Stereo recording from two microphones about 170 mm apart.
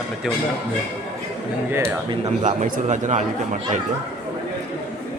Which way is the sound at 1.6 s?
15° right (ahead or behind).